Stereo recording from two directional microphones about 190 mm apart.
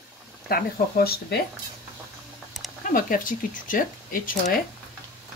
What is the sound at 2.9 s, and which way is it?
Speech, 45° left (ahead or behind).